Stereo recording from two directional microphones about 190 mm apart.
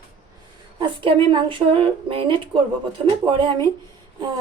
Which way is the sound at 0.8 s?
25° right (ahead or behind).